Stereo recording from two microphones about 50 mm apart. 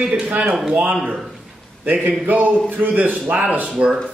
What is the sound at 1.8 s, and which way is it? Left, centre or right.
A man's voice, right.